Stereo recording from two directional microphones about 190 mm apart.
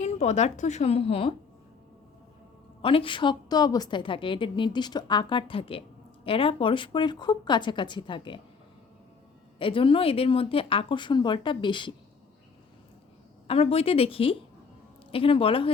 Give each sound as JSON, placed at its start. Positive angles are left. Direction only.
{"t": 0.0, "sound": "a woman's voice", "side_deg": 35}
{"t": 2.8, "sound": "a woman's voice", "side_deg": 30}
{"t": 9.6, "sound": "a woman's voice", "side_deg": 25}
{"t": 13.5, "sound": "a woman's voice", "side_deg": 30}